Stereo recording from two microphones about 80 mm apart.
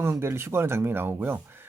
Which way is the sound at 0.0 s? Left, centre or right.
Right.